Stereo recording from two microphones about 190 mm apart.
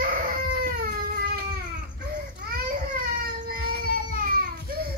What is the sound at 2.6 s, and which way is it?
Baby cry, 50° right (ahead or behind).